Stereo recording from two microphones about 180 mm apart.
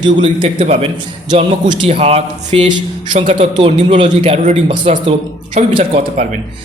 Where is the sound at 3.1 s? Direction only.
45° right (ahead or behind).